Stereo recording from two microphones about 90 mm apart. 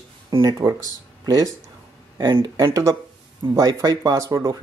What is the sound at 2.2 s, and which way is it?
Speech, 55° right (ahead or behind).